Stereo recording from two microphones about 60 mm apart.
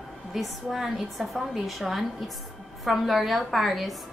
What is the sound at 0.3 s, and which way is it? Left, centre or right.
A woman's voice, centre.